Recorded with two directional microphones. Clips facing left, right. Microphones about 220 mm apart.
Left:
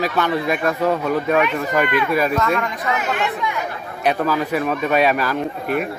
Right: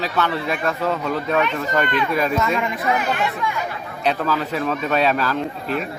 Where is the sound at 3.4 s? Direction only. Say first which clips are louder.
Left 1 dB; 20° left (ahead or behind).